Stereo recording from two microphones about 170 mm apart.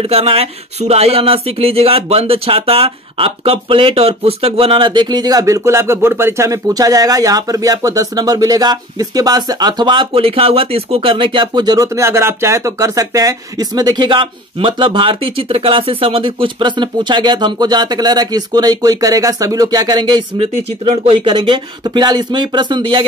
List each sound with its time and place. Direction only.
0.1 s speech: 35° right (ahead or behind)